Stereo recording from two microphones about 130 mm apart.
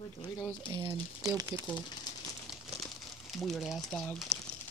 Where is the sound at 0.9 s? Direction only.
25° right (ahead or behind).